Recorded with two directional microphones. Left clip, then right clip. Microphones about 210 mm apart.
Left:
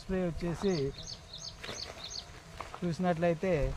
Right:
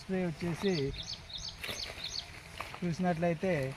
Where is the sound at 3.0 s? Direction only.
5° left (ahead or behind).